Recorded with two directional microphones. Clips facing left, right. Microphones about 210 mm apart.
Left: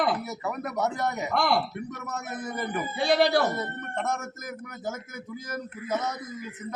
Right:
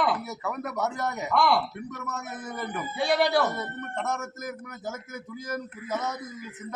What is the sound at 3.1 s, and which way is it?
Speech, 35° left (ahead or behind).